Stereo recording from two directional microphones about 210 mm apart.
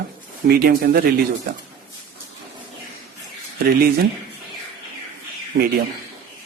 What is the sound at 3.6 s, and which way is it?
Speech, 45° right (ahead or behind).